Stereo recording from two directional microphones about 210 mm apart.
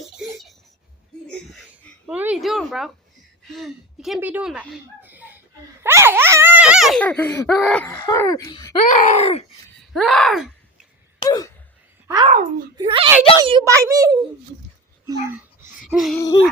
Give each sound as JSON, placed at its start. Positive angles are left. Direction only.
{"t": 0.2, "sound": "a sound", "side_deg": 0}
{"t": 2.0, "sound": "speech", "side_deg": -5}
{"t": 5.8, "sound": "giggle", "side_deg": -10}
{"t": 7.9, "sound": "speech", "side_deg": 15}
{"t": 8.8, "sound": "speech", "side_deg": 35}
{"t": 9.9, "sound": "groan", "side_deg": 0}
{"t": 11.2, "sound": "a sound", "side_deg": 15}
{"t": 12.0, "sound": "a sound", "side_deg": -15}
{"t": 12.3, "sound": "a child's voice", "side_deg": -40}
{"t": 12.7, "sound": "a child's voice", "side_deg": -20}
{"t": 15.0, "sound": "dog", "side_deg": -10}
{"t": 15.8, "sound": "a sound", "side_deg": 0}
{"t": 16.1, "sound": "speech", "side_deg": 15}